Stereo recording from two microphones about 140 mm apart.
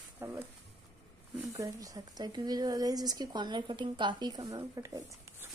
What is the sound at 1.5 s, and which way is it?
Speech, 25° right (ahead or behind).